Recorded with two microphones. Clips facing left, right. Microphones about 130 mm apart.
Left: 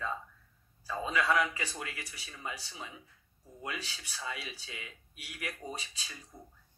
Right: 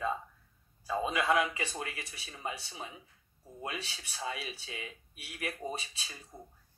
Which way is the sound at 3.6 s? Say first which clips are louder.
Right 1 dB; 30° right (ahead or behind).